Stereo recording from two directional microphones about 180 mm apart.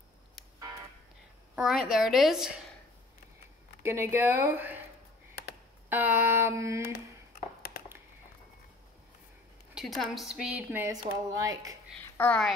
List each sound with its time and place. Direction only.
1.5 s a woman's voice: centre (ahead or behind)
3.8 s speech: 15° right (ahead or behind)
5.9 s speech: 10° right (ahead or behind)
9.8 s a woman's voice: centre (ahead or behind)
10.8 s speech: 20° right (ahead or behind)
12.0 s a woman's voice: 10° left (ahead or behind)